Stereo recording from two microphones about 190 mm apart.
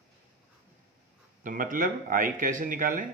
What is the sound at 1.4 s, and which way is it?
A man's voice, 45° right (ahead or behind).